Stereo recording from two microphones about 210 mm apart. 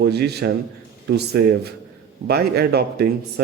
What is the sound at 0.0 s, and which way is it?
A man's voice, 50° right (ahead or behind).